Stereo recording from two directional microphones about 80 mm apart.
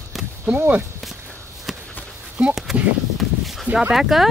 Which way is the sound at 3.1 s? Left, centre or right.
Centre.